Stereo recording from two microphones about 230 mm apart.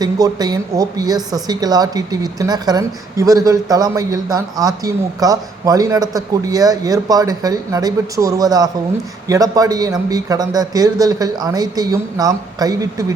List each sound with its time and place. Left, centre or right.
0.0 s speech: centre